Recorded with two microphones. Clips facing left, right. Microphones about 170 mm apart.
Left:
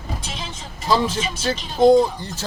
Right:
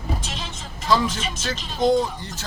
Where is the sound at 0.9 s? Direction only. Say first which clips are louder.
Left 1 dB; 30° left (ahead or behind).